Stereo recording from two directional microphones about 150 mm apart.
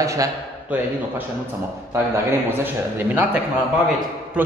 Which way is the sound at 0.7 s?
10° right (ahead or behind).